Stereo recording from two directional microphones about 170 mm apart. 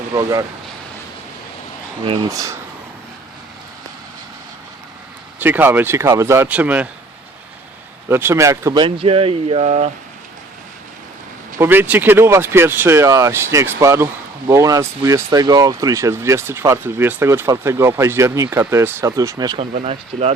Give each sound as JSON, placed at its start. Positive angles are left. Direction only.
{"t": 0.1, "sound": "speech", "side_deg": -20}
{"t": 2.0, "sound": "speech", "side_deg": -25}
{"t": 5.4, "sound": "speech", "side_deg": -10}
{"t": 8.1, "sound": "speech", "side_deg": -15}
{"t": 11.6, "sound": "speech", "side_deg": -10}
{"t": 19.5, "sound": "speech", "side_deg": -35}